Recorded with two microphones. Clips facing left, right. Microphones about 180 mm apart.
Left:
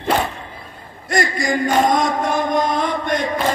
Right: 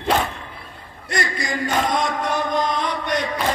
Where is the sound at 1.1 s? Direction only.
50° left (ahead or behind).